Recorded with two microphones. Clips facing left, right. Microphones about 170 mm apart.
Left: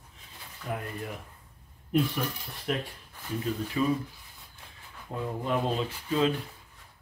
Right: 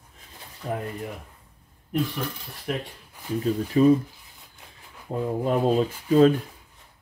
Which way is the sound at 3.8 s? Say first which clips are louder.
Right 10 dB; 40° right (ahead or behind).